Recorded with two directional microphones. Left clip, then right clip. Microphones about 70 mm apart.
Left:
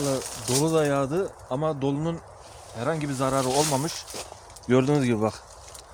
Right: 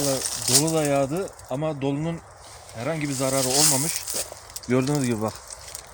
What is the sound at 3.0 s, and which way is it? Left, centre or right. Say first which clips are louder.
Speech: right 2 dB; left.